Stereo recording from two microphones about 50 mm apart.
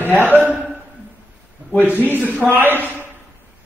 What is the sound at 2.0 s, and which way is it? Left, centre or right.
Speech, right.